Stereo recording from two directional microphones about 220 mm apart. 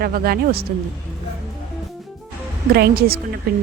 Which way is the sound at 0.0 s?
45° right (ahead or behind).